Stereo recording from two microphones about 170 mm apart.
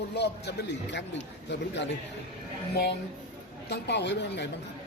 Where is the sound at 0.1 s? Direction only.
85° left.